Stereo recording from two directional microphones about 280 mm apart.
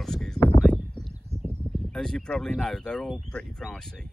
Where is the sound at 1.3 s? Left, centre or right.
Right.